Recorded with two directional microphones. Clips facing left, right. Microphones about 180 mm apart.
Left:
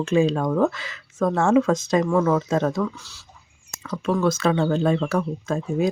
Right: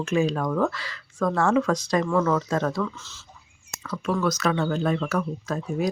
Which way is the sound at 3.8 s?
25° left (ahead or behind).